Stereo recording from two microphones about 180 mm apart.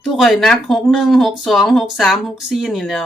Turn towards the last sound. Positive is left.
turn(degrees=0)  # may be behind; listen again after turning